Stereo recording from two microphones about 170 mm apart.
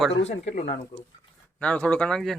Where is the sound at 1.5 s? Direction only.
5° left (ahead or behind).